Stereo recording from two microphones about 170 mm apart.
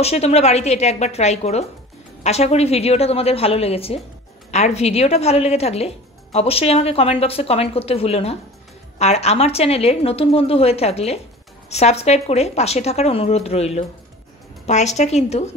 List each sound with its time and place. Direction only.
0.0 s speech: 40° left (ahead or behind)